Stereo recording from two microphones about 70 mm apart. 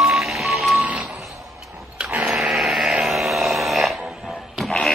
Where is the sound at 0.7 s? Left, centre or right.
Centre.